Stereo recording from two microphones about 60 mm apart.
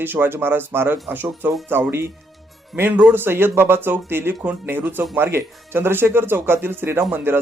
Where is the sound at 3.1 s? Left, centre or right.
Right.